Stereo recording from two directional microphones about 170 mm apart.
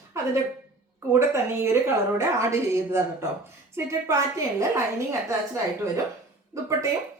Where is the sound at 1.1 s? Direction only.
15° right (ahead or behind).